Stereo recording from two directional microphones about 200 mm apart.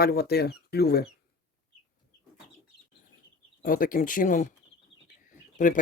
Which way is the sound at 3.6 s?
45° left (ahead or behind).